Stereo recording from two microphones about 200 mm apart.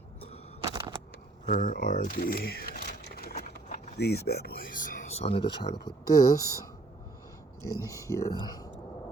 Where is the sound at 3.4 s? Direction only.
35° left (ahead or behind).